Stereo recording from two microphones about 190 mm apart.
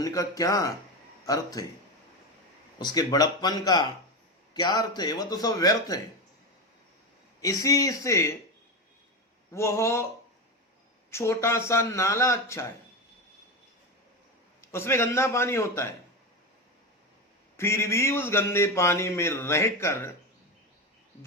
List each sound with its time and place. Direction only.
0.0 s speech: 20° left (ahead or behind)
2.7 s speech: 20° left (ahead or behind)
7.4 s speech: 15° left (ahead or behind)
9.5 s speech: 15° left (ahead or behind)
11.1 s speech: 15° left (ahead or behind)
14.7 s speech: 15° left (ahead or behind)
17.6 s speech: 15° left (ahead or behind)